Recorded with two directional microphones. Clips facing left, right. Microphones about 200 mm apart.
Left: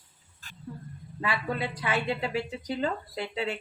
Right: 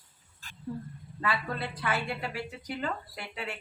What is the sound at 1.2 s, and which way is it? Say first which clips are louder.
A woman's voice: left 2 dB; 15° left (ahead or behind).